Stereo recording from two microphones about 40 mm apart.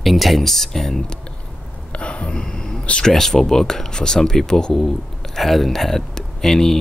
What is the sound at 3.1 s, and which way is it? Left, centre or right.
Speech, centre.